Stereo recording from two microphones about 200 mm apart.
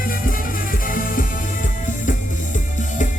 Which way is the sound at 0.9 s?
45° left (ahead or behind).